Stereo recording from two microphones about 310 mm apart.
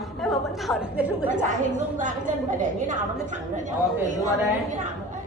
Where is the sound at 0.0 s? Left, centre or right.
Centre.